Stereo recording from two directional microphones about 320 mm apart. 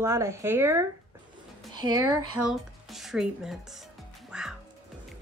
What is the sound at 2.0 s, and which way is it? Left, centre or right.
Speech, right.